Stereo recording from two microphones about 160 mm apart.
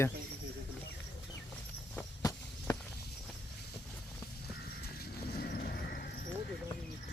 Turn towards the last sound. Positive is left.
turn(degrees=70)  # may be behind; listen again after turning